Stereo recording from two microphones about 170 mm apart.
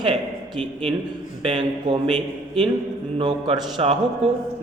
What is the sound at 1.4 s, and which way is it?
Speech, 30° right (ahead or behind).